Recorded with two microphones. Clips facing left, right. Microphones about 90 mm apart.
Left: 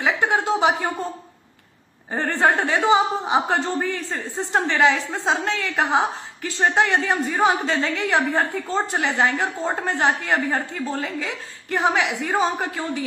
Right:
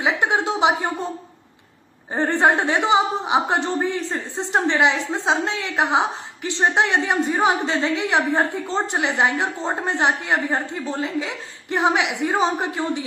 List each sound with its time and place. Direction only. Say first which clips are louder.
0.0 s a woman's voice: even; 20° right (ahead or behind)
2.1 s a woman's voice: right 2 dB; 20° right (ahead or behind)